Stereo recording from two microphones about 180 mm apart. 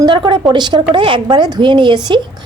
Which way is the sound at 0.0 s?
25° right (ahead or behind).